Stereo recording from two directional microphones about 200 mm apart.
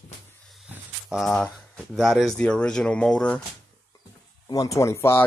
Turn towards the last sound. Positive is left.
turn(degrees=15)  # may be behind; listen again after turning